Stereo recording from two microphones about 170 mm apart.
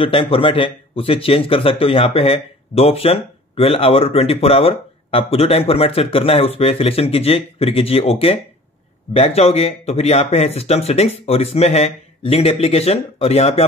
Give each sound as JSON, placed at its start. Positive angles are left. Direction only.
{"t": 0.0, "sound": "speech", "side_deg": 30}